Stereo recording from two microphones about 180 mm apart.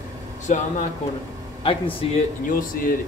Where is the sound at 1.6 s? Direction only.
30° left (ahead or behind).